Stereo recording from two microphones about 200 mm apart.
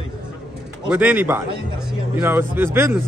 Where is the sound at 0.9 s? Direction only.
10° right (ahead or behind).